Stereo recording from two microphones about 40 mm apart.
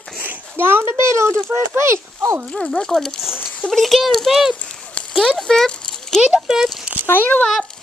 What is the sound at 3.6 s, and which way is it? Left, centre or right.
Speech, centre.